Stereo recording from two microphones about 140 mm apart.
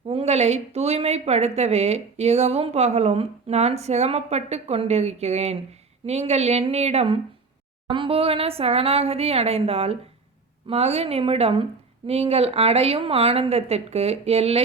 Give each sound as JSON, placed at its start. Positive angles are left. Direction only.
{"t": 0.1, "sound": "speech", "side_deg": -45}